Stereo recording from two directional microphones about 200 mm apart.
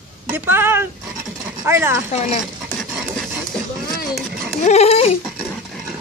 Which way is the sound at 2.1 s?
35° left (ahead or behind).